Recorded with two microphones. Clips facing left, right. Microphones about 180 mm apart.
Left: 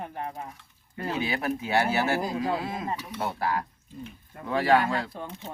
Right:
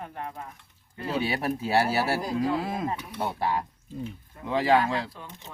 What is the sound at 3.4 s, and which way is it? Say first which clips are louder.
Speech: right 1 dB; 25° right (ahead or behind).